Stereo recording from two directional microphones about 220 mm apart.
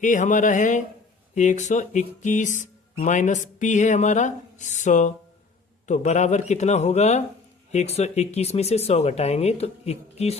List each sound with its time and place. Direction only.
0.0 s speech: 35° left (ahead or behind)